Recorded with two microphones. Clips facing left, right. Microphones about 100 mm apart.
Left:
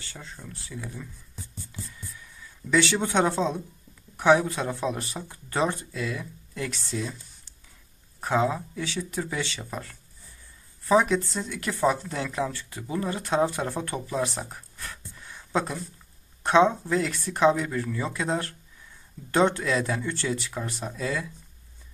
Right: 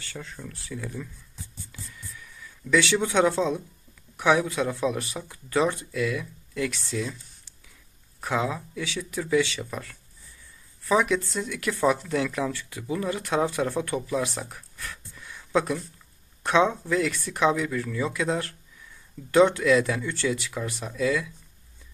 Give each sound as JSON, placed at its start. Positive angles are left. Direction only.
{"t": 0.0, "sound": "speech", "side_deg": 25}
{"t": 1.7, "sound": "a sound", "side_deg": 25}
{"t": 4.2, "sound": "speech", "side_deg": 30}
{"t": 8.2, "sound": "speech", "side_deg": 30}